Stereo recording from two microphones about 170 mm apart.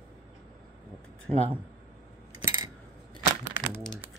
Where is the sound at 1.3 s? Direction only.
40° right (ahead or behind).